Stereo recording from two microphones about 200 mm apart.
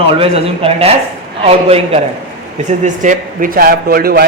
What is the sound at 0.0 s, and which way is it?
A man's voice, 30° right (ahead or behind).